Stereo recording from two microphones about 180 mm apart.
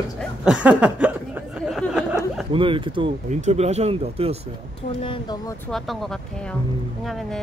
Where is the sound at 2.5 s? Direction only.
30° right (ahead or behind).